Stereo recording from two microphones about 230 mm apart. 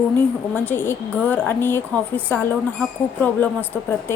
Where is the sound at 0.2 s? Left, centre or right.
Centre.